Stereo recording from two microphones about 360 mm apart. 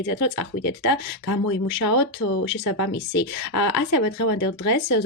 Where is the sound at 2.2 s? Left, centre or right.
Left.